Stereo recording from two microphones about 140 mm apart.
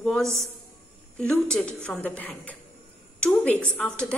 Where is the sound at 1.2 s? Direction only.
5° left (ahead or behind).